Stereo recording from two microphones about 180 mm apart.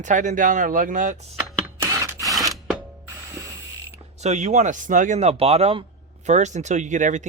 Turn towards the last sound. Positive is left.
turn(degrees=-45)  # may be behind; listen again after turning